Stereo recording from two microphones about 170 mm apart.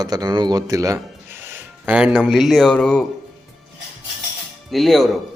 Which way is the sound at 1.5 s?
10° right (ahead or behind).